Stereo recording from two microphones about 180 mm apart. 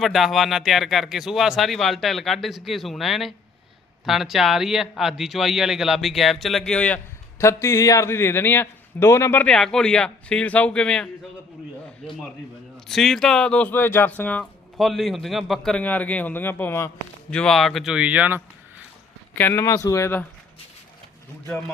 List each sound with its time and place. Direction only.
0.0 s a man's voice: centre (ahead or behind)
19.4 s speech: 15° left (ahead or behind)